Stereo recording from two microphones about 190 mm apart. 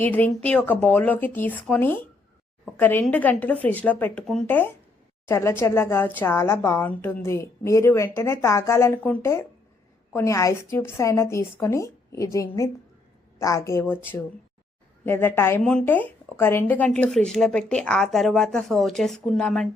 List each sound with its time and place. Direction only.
0.0 s a woman's voice: 10° left (ahead or behind)